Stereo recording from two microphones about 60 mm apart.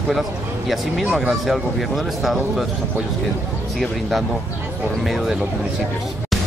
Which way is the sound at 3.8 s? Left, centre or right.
Centre.